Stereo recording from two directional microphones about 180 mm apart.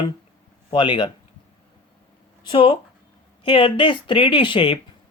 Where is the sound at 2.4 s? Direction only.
25° left (ahead or behind).